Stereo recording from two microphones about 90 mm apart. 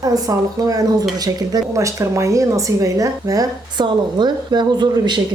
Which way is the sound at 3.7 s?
55° right (ahead or behind).